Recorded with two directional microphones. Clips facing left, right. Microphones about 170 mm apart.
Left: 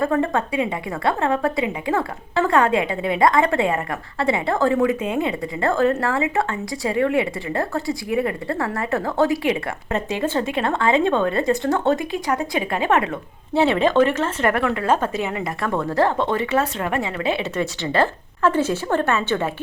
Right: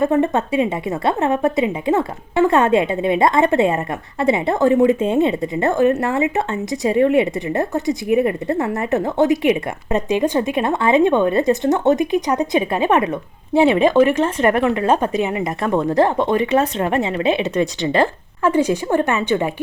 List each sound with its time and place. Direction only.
0.0 s speech: 20° right (ahead or behind)